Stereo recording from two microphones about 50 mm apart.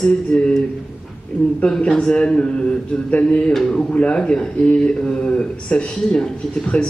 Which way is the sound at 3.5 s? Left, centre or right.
Centre.